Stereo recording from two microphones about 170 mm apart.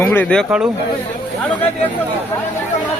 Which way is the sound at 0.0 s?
10° left (ahead or behind).